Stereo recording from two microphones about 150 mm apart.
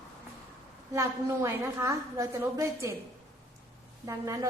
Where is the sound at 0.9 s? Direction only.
20° right (ahead or behind).